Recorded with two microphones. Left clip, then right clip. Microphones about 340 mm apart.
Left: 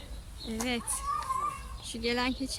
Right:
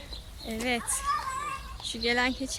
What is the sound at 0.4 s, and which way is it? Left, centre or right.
Speech, centre.